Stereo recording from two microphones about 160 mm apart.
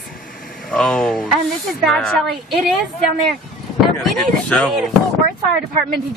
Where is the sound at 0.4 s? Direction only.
60° left (ahead or behind).